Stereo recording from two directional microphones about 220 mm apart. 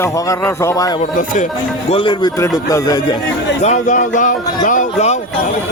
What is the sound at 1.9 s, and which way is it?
A man's voice, 20° left (ahead or behind).